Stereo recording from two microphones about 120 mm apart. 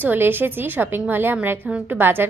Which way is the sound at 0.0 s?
15° right (ahead or behind).